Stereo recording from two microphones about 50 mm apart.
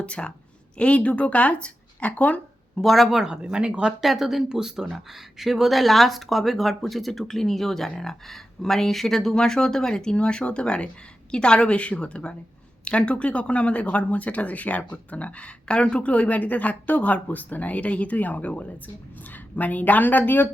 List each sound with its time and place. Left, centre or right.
0.0 s speech: left
2.8 s speech: centre
3.3 s speech: centre
4.0 s a woman's voice: centre; by 20.5 s left